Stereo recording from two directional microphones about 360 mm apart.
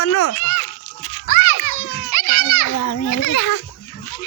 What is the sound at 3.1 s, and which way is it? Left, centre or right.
Speech, left.